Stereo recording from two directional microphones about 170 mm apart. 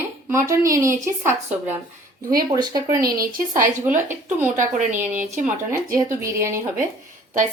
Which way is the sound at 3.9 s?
15° right (ahead or behind).